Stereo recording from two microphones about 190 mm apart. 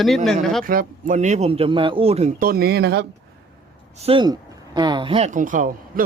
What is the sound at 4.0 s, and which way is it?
Speech, 30° right (ahead or behind).